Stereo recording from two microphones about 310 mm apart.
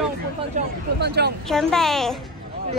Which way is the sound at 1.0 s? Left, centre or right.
Right.